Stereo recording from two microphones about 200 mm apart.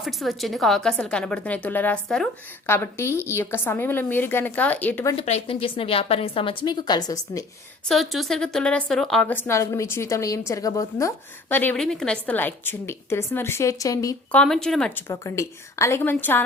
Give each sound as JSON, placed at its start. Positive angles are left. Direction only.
{"t": 0.0, "sound": "a woman's voice", "side_deg": 0}
{"t": 5.1, "sound": "a woman's voice", "side_deg": 30}
{"t": 7.9, "sound": "a woman's voice", "side_deg": 0}
{"t": 14.4, "sound": "a woman's voice", "side_deg": 0}